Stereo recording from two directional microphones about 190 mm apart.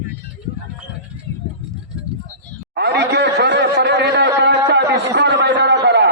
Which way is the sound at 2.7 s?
65° right (ahead or behind).